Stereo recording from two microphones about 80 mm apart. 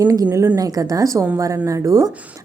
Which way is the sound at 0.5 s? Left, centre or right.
Right.